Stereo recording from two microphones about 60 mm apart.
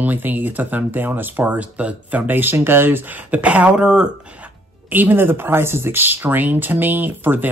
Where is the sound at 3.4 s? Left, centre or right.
Right.